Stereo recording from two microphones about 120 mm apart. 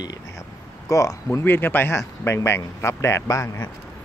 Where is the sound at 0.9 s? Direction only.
25° left (ahead or behind).